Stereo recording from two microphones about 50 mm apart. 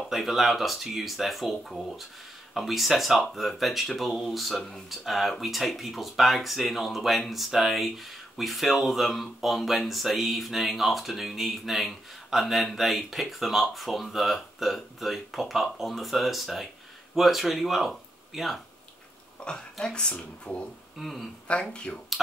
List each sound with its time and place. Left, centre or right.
0.1 s speech: centre
19.4 s speech: centre
21.0 s speech: centre
21.5 s speech: left